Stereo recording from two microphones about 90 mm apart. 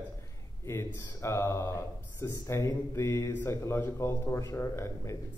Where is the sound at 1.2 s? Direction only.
30° left (ahead or behind).